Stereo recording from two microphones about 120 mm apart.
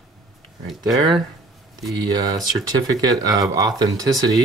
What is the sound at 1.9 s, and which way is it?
Speech, 35° right (ahead or behind).